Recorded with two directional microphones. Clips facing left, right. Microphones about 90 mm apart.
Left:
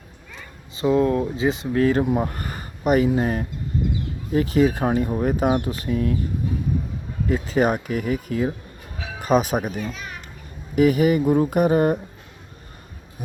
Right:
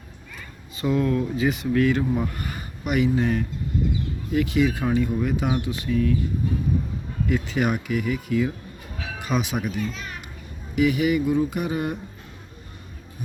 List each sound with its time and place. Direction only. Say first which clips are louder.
0.8 s speech: left 4 dB; 25° left (ahead or behind)
7.3 s speech: left 4 dB; 35° left (ahead or behind)
9.8 s a child's voice: even; 5° left (ahead or behind)
10.8 s speech: left 4 dB; 40° left (ahead or behind)